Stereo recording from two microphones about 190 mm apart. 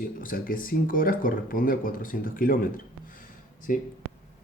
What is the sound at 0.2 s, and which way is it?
Speech, 45° left (ahead or behind).